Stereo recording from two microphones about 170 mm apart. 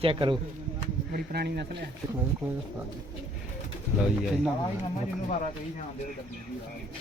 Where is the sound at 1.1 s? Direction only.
70° right (ahead or behind).